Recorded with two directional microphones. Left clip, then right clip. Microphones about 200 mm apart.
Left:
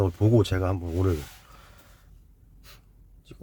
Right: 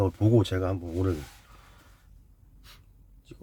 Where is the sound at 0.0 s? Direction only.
10° left (ahead or behind).